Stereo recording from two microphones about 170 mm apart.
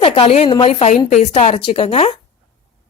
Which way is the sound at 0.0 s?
35° left (ahead or behind).